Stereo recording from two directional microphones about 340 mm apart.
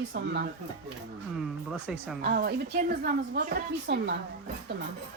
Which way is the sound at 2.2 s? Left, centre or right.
Right.